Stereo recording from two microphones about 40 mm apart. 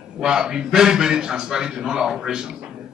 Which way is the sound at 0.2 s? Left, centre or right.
Centre.